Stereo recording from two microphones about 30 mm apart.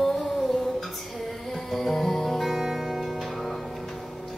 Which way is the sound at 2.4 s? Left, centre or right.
Centre.